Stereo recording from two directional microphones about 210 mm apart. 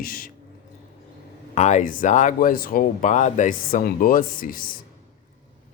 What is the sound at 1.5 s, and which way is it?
Speech, 35° left (ahead or behind).